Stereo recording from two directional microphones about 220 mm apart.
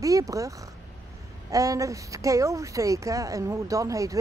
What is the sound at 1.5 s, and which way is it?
Speech, 15° right (ahead or behind).